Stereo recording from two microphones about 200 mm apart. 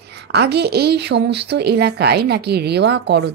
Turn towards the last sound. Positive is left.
turn(degrees=-55)  # may be behind; listen again after turning